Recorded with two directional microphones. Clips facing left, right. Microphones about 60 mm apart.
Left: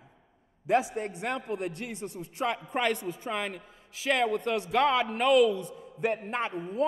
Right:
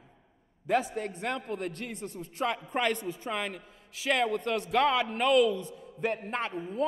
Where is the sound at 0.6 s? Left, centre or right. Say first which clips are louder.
Left 2 dB; centre.